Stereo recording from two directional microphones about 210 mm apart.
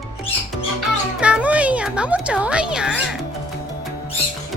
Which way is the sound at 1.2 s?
5° right (ahead or behind).